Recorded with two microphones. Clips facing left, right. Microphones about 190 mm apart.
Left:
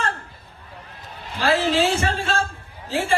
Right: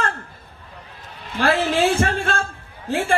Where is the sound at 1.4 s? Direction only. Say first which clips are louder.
Right 1 dB; 55° right (ahead or behind).